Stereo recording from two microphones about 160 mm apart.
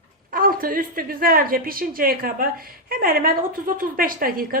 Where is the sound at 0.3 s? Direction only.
60° right (ahead or behind).